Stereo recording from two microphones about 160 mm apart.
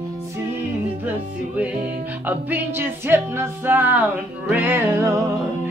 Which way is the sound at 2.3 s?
10° right (ahead or behind).